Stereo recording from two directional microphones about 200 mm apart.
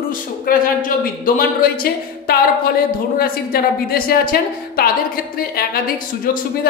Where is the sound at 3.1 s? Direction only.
50° left (ahead or behind).